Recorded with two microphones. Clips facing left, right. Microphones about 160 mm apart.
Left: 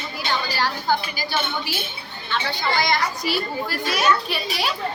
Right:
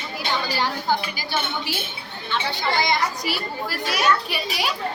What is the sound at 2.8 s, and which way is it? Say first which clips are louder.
A child's voice: even; 20° right (ahead or behind).